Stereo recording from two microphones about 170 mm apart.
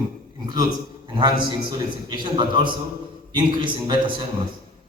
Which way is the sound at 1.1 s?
25° right (ahead or behind).